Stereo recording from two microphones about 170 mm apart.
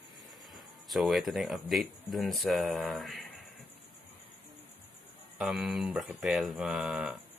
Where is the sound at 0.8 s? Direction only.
Centre (ahead or behind).